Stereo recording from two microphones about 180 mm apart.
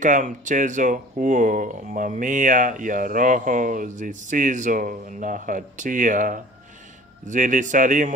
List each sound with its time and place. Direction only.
0.0 s speech: 45° right (ahead or behind)